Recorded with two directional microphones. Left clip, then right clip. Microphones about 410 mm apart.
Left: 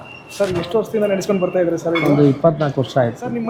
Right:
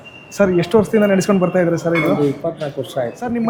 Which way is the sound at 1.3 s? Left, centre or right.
Right.